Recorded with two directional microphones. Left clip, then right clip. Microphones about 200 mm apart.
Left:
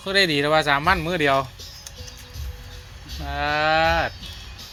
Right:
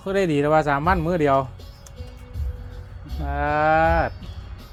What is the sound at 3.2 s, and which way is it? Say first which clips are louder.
Speech: right 1 dB; 20° right (ahead or behind).